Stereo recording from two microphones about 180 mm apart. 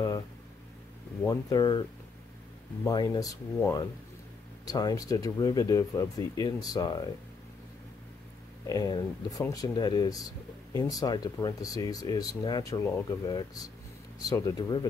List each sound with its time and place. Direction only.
1.2 s speech: 20° left (ahead or behind)
2.9 s speech: 20° left (ahead or behind)
8.6 s speech: 20° left (ahead or behind)